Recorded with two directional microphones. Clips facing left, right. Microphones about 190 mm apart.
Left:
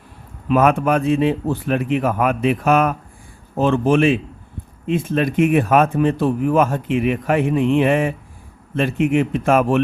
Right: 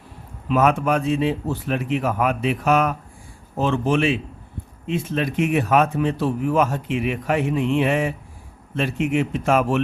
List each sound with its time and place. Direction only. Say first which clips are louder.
0.4 s a man's voice: left 3 dB; 55° left (ahead or behind)